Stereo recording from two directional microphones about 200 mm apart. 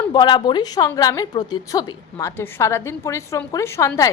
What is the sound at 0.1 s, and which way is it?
A woman's voice, 20° left (ahead or behind).